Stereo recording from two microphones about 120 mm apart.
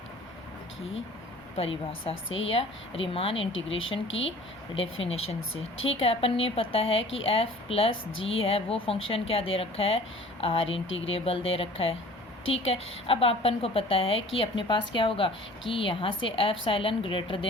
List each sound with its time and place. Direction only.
1.5 s a woman's voice: 55° left (ahead or behind)
4.7 s a woman's voice: 60° left (ahead or behind)